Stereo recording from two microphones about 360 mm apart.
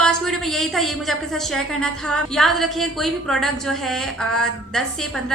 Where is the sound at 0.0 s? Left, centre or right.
Centre.